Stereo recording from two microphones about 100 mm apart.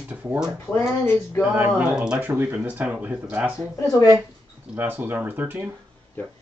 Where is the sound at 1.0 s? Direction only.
25° left (ahead or behind).